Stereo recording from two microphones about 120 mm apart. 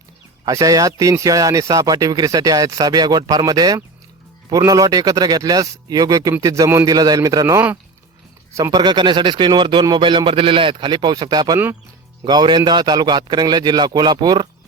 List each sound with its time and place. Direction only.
0.4 s a man's voice: 30° right (ahead or behind)
8.7 s speech: 35° right (ahead or behind)